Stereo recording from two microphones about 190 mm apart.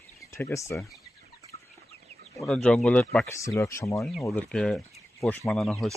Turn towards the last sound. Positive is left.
turn(degrees=5)  # may be behind; listen again after turning